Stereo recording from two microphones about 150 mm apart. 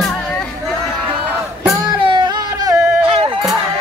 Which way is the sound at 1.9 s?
35° right (ahead or behind).